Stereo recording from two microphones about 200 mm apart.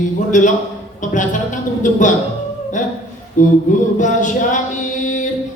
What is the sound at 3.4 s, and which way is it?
Singing, 40° left (ahead or behind).